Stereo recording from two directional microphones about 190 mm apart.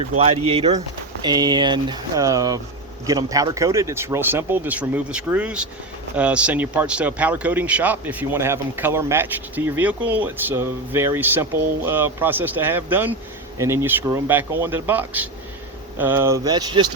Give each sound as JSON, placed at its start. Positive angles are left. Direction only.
{"t": 0.2, "sound": "speech", "side_deg": -30}